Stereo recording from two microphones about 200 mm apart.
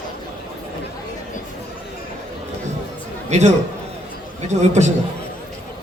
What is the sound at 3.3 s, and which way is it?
Speech, 35° right (ahead or behind).